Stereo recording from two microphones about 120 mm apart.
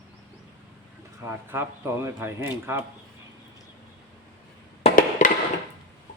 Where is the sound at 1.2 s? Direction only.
20° right (ahead or behind).